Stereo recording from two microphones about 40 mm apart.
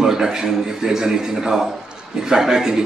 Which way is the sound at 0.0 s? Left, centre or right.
Centre.